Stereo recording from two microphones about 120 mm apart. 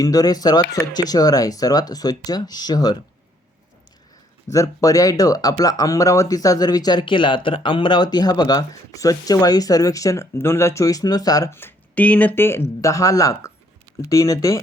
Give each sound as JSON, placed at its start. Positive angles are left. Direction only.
{"t": 0.0, "sound": "speech", "side_deg": 30}
{"t": 4.5, "sound": "speech", "side_deg": 30}